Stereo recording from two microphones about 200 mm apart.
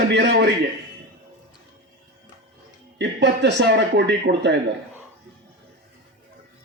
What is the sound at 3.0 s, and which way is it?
A man's voice, 60° right (ahead or behind).